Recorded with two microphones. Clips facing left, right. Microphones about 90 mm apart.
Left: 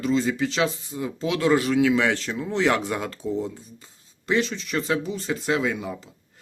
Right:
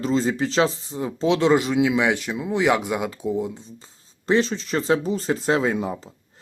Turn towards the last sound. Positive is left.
turn(degrees=-35)  # may be behind; listen again after turning